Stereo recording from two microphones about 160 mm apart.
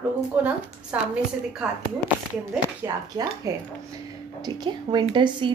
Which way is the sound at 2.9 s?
25° right (ahead or behind).